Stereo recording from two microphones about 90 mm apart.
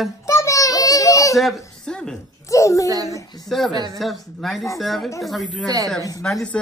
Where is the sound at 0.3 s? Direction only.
35° left (ahead or behind).